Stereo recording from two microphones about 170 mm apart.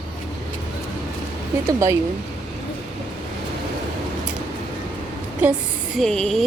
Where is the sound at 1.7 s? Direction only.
15° right (ahead or behind).